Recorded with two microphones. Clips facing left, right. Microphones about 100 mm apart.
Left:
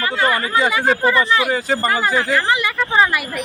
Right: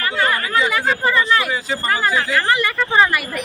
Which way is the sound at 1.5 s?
45° left (ahead or behind).